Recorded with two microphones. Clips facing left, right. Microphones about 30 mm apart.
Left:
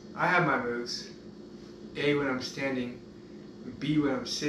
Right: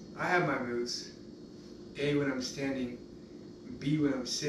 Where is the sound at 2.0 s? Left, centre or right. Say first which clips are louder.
Left 3 dB; left.